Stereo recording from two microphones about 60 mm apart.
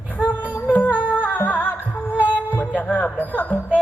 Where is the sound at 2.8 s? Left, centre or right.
Left.